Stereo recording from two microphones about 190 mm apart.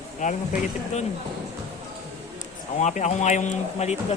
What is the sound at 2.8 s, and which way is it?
Speech, 40° left (ahead or behind).